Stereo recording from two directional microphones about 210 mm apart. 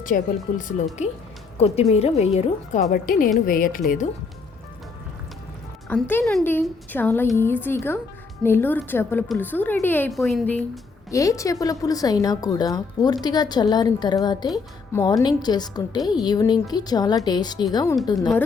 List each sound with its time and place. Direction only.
0.0 s a woman's voice: 40° left (ahead or behind)
2.9 s a woman's voice: 40° left (ahead or behind)
5.9 s a woman's voice: 10° left (ahead or behind)